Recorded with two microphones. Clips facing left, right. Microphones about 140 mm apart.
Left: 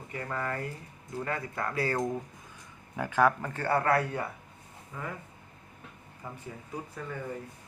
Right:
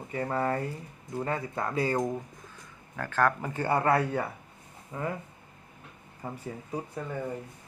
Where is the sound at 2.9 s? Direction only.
15° left (ahead or behind).